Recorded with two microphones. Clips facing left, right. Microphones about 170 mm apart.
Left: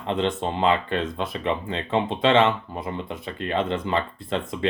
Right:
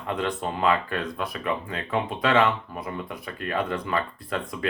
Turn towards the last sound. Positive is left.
turn(degrees=25)  # may be behind; listen again after turning